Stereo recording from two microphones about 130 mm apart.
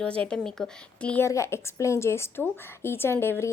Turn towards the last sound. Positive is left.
turn(degrees=15)  # may be behind; listen again after turning